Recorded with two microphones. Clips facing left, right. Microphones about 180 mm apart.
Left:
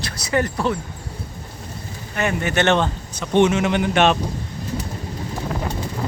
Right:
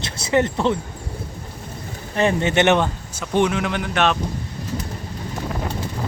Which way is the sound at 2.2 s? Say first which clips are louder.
Right 3 dB; 30° right (ahead or behind).